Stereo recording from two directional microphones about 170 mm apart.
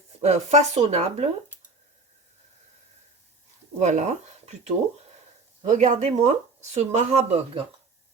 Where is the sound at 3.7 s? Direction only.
45° right (ahead or behind).